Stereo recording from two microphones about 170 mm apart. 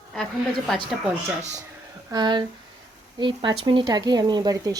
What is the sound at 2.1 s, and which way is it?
Speech, 25° right (ahead or behind).